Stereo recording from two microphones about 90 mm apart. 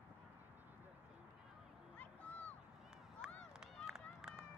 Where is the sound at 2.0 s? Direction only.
15° left (ahead or behind).